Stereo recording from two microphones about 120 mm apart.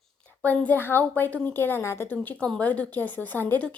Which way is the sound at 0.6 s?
15° left (ahead or behind).